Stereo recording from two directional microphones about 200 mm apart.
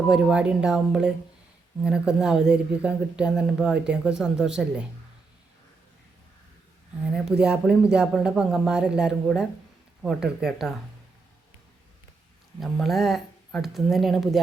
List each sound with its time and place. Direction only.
0.1 s a woman's voice: 5° right (ahead or behind)
7.0 s a woman's voice: centre (ahead or behind)
12.5 s a woman's voice: centre (ahead or behind)